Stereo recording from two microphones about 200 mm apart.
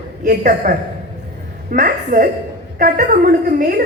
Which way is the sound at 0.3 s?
45° right (ahead or behind).